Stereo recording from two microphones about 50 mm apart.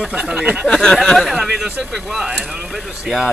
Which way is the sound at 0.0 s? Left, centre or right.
Centre.